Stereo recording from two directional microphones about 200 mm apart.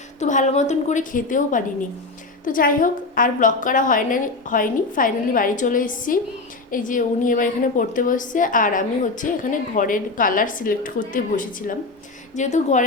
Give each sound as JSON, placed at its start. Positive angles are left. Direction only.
{"t": 0.2, "sound": "a woman's voice", "side_deg": 35}